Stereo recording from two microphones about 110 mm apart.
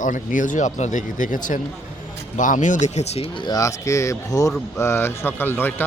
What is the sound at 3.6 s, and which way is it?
Speech, 25° left (ahead or behind).